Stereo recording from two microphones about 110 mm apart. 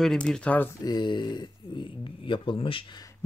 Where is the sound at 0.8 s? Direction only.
40° left (ahead or behind).